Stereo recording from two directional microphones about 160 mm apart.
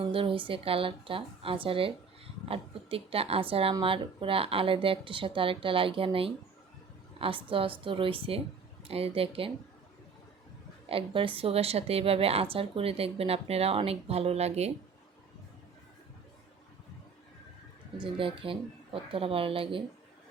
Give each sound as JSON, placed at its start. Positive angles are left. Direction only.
{"t": 0.0, "sound": "speech", "side_deg": -35}
{"t": 10.8, "sound": "speech", "side_deg": -35}
{"t": 17.9, "sound": "speech", "side_deg": -30}